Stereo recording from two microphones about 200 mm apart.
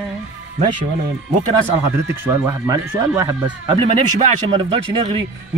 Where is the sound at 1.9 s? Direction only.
10° right (ahead or behind).